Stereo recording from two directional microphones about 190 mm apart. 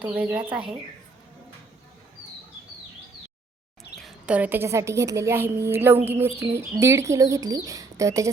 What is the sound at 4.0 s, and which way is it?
Speech, 5° right (ahead or behind).